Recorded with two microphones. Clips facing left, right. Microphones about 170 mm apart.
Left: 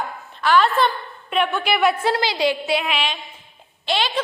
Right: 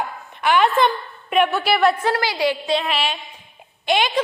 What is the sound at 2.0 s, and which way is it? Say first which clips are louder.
Speech: even; 15° left (ahead or behind).